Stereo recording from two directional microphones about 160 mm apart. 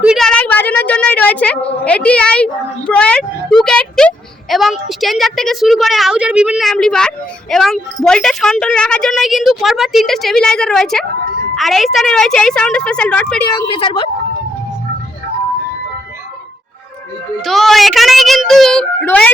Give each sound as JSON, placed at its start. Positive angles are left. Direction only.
{"t": 0.0, "sound": "a woman's voice", "side_deg": 0}
{"t": 13.7, "sound": "a woman's voice", "side_deg": 35}
{"t": 17.4, "sound": "a woman's voice", "side_deg": 0}